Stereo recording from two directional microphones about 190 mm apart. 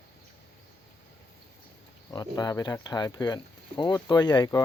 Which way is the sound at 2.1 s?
20° left (ahead or behind).